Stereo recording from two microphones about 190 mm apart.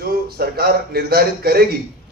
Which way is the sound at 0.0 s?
55° right (ahead or behind).